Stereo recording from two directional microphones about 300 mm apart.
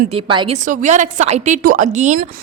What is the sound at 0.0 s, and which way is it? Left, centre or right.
A woman's voice, centre.